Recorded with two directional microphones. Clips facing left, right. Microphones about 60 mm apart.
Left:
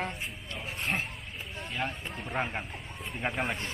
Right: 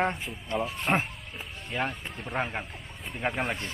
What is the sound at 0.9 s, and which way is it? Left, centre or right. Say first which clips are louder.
Speech: right 6 dB; right.